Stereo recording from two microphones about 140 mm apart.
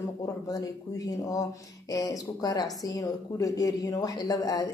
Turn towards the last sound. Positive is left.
turn(degrees=25)  # may be behind; listen again after turning